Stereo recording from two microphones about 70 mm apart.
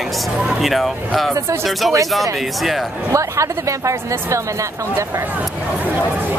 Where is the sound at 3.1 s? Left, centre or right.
Right.